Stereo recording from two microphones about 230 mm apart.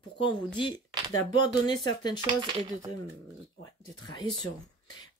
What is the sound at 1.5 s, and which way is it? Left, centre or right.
Speech, centre.